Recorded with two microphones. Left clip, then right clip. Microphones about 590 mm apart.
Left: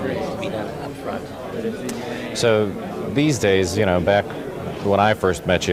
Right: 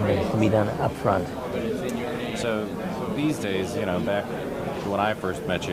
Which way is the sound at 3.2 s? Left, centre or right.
Left.